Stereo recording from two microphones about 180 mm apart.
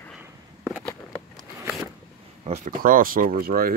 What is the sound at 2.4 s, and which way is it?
Speech, 40° right (ahead or behind).